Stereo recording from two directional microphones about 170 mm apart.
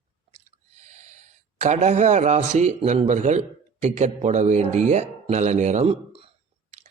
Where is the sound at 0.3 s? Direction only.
40° right (ahead or behind).